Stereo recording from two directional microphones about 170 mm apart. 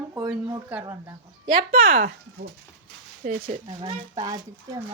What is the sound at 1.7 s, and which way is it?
Speech, 55° right (ahead or behind).